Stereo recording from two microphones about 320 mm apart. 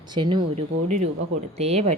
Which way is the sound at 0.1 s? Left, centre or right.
Centre.